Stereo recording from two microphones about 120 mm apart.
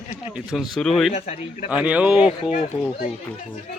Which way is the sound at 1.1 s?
65° left (ahead or behind).